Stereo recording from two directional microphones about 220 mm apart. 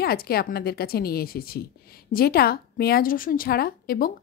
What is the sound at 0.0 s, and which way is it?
A woman's voice, 45° left (ahead or behind).